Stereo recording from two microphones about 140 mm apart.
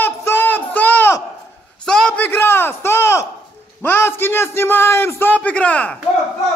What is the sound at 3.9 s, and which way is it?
A man's voice, 15° left (ahead or behind).